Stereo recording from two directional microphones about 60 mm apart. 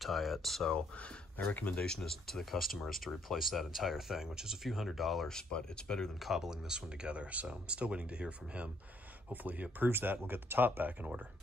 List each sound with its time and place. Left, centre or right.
0.0 s speech: centre
0.7 s speech: left
1.8 s speech: centre
5.3 s speech: centre
6.1 s speech: centre; by 11.1 s right